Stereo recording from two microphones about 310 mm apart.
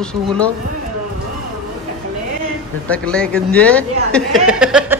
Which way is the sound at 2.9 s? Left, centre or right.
Centre.